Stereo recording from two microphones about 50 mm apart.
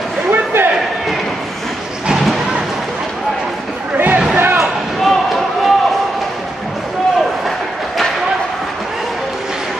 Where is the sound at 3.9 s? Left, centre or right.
Right.